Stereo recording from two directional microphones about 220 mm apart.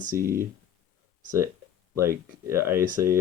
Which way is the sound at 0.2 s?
40° right (ahead or behind).